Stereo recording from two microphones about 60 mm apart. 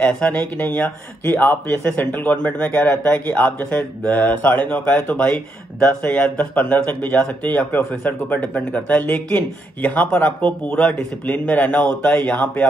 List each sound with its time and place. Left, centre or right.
0.0 s speech: left
0.7 s speech: left